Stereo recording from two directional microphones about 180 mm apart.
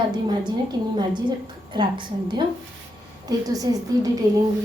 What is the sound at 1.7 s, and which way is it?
A woman's voice, 25° right (ahead or behind).